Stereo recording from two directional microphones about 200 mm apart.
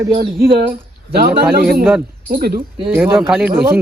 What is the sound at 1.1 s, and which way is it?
A man's voice, 50° right (ahead or behind).